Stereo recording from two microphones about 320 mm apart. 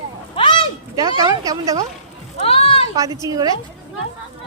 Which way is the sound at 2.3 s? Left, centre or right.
Centre.